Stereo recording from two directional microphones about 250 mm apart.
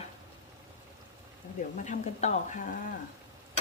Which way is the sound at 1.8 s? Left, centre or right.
Left.